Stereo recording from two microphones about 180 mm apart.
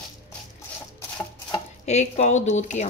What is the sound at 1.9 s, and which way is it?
Speech, 40° left (ahead or behind).